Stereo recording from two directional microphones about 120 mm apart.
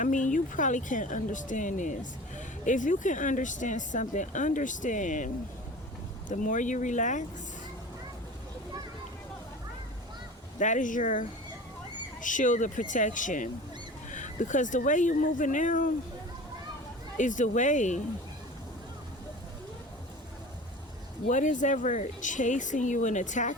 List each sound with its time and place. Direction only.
0.0 s speech: 90° left
10.6 s speech: 90° left
17.2 s speech: 90° left
21.2 s speech: 90° left